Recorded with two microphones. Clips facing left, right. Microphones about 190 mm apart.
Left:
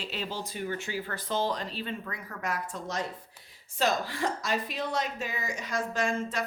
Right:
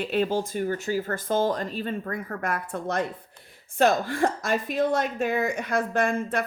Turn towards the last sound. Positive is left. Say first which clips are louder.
# right 5 dB
turn(degrees=-55)  # may be behind; listen again after turning